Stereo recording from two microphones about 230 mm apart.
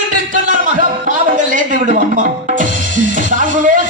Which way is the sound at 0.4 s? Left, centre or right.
Right.